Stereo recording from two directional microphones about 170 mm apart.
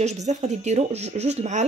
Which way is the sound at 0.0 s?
45° right (ahead or behind).